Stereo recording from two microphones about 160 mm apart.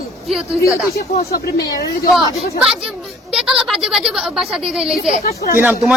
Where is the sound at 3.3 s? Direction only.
5° right (ahead or behind).